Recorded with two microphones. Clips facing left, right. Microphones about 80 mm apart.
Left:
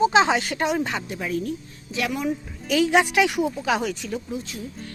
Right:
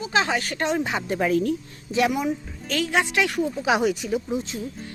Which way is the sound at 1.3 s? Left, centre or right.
Right.